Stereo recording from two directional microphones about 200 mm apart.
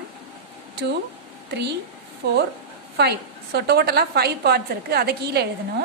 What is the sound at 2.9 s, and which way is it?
A woman's voice, 55° right (ahead or behind).